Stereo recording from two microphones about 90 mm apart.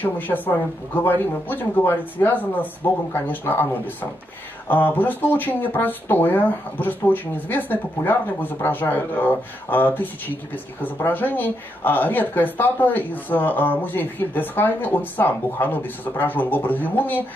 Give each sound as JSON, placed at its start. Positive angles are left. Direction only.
{"t": 0.0, "sound": "speech", "side_deg": 20}